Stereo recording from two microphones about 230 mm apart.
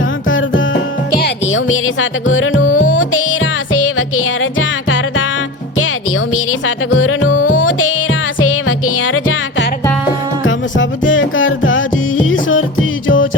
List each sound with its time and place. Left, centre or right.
0.3 s music: left
2.7 s music: left
3.9 s music: left
6.3 s music: left
7.4 s music: left
8.6 s music: left